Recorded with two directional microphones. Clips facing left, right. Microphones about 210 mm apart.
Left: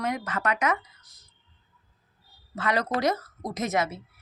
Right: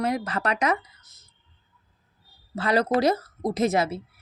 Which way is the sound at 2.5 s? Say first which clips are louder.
Right 5 dB; 30° right (ahead or behind).